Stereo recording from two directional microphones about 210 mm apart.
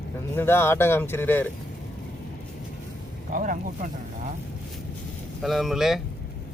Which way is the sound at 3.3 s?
40° right (ahead or behind).